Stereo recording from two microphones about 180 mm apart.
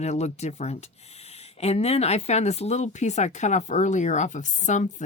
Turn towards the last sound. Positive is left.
turn(degrees=40)  # may be behind; listen again after turning